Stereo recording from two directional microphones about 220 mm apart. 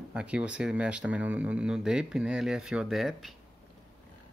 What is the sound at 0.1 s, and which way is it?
Speech, 5° right (ahead or behind).